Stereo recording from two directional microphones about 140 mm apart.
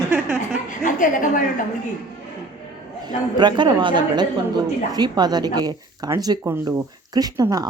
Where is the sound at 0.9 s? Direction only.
70° left (ahead or behind).